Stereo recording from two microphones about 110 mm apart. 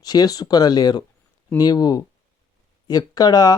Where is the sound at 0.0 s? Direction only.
35° left (ahead or behind).